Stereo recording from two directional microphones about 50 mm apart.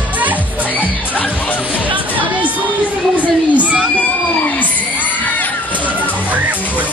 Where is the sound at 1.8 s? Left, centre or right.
Right.